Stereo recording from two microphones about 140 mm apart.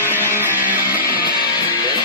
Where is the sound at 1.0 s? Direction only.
90° left.